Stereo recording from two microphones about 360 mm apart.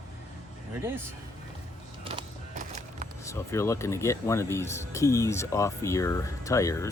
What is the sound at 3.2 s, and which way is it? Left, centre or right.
Speech, centre.